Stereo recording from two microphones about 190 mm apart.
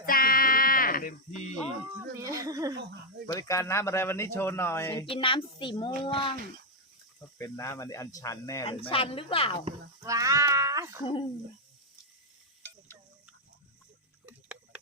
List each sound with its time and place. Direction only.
0.0 s a sound: 50° left (ahead or behind)
2.1 s a sound: 15° right (ahead or behind)
3.3 s speech: 15° left (ahead or behind)
5.0 s a woman's voice: 30° left (ahead or behind)
7.2 s speech: 15° left (ahead or behind)
8.6 s a woman's voice: 30° left (ahead or behind)
9.6 s speech: 20° right (ahead or behind)
11.0 s a woman's voice: 25° left (ahead or behind)